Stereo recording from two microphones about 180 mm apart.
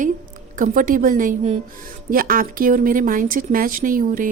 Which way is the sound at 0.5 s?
50° right (ahead or behind).